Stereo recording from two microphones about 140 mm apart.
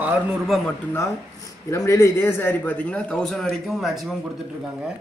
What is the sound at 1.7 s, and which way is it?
A man's voice, 20° left (ahead or behind).